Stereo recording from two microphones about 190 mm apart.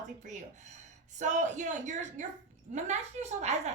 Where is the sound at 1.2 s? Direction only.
40° right (ahead or behind).